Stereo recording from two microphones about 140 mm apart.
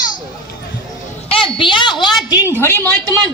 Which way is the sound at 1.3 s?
40° left (ahead or behind).